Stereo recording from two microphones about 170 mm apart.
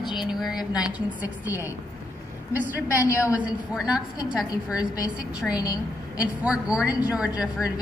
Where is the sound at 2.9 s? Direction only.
15° left (ahead or behind).